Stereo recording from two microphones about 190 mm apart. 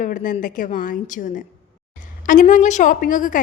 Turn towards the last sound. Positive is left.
turn(degrees=45)  # may be behind; listen again after turning